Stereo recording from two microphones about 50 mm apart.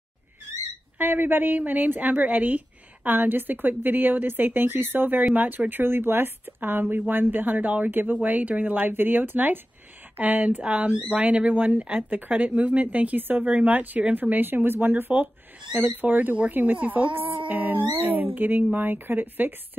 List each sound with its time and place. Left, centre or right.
0.9 s speech: right